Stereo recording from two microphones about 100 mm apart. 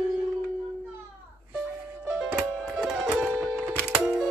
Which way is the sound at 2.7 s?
10° right (ahead or behind).